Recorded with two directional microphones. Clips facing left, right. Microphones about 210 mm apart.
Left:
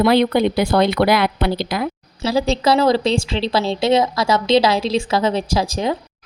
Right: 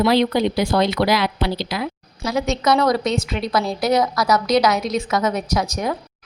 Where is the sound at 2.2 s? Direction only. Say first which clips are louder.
Left 3 dB; 30° left (ahead or behind).